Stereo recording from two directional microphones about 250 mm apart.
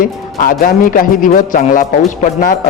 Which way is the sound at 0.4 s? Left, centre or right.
Left.